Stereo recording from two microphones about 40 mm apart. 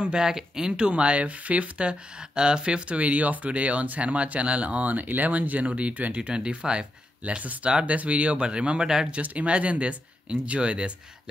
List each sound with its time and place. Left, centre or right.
0.0 s speech: centre
3.0 s speech: right
9.1 s speech: right